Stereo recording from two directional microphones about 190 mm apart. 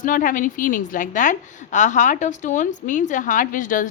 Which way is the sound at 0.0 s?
45° left (ahead or behind).